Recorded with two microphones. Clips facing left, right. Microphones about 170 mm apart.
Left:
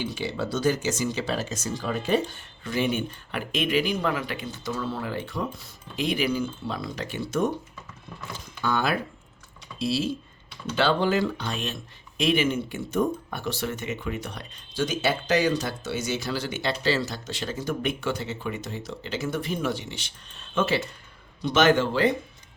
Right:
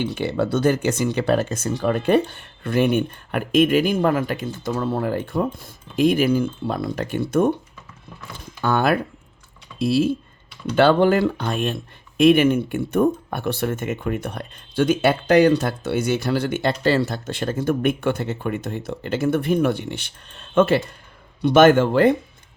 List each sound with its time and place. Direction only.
0.0 s speech: 55° right (ahead or behind)
8.6 s a man's voice: 55° right (ahead or behind)